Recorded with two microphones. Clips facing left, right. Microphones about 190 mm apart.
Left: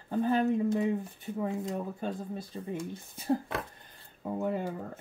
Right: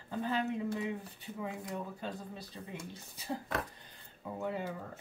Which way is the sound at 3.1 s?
50° left (ahead or behind).